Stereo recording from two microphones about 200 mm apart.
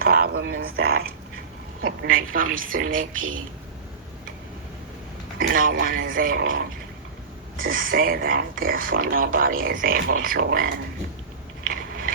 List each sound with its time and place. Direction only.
0.0 s a woman's voice: 50° right (ahead or behind)
5.4 s a woman's voice: 45° right (ahead or behind)
11.7 s biting: 45° right (ahead or behind)